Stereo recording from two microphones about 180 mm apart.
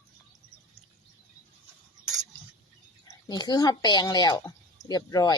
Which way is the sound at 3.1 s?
20° left (ahead or behind).